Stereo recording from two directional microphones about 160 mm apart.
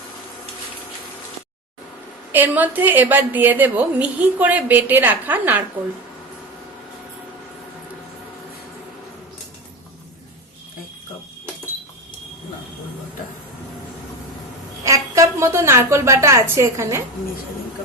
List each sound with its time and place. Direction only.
2.3 s a woman's voice: 10° right (ahead or behind)
14.8 s a woman's voice: 20° right (ahead or behind)